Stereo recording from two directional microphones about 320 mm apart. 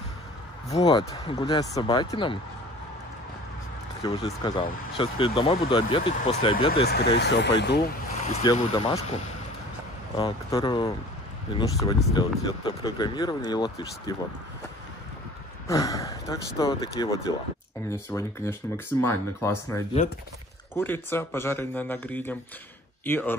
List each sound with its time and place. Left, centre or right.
0.7 s speech: centre
4.0 s speech: centre
6.7 s speech: left
8.3 s speech: centre
15.6 s speech: centre